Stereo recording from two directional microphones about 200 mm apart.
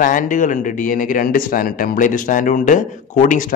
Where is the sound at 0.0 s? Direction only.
40° left (ahead or behind).